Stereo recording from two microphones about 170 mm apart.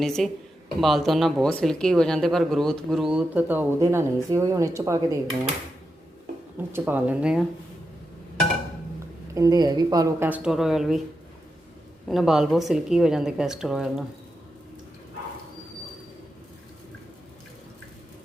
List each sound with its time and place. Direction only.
0.0 s speech: centre (ahead or behind); by 5.2 s 20° right (ahead or behind)
6.7 s speech: 10° right (ahead or behind)
9.3 s speech: 20° right (ahead or behind)
10.2 s speech: 5° right (ahead or behind)
12.0 s speech: centre (ahead or behind)